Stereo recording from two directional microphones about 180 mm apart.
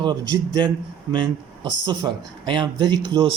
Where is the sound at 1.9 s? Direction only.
25° right (ahead or behind).